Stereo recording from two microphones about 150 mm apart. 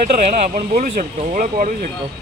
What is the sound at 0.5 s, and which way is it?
Speech, 60° right (ahead or behind).